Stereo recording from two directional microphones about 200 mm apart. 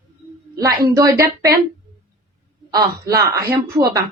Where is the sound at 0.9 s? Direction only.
15° right (ahead or behind).